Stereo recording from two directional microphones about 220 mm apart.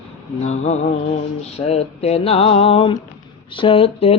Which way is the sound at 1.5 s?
30° left (ahead or behind).